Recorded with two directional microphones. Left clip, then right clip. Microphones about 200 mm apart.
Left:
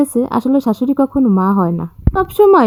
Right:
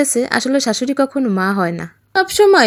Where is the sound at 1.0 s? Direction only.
30° right (ahead or behind).